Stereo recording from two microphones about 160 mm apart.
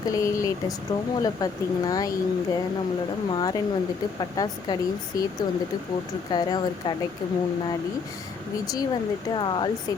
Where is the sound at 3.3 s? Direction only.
25° left (ahead or behind).